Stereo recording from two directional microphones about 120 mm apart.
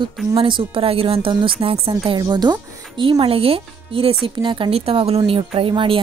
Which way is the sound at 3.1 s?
55° right (ahead or behind).